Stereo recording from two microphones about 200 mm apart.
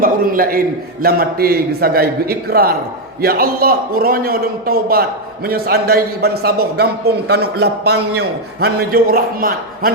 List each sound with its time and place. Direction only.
0.0 s a man's voice: 45° right (ahead or behind)